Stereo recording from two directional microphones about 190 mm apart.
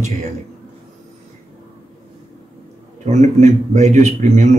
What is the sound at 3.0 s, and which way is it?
A man's voice, 35° right (ahead or behind).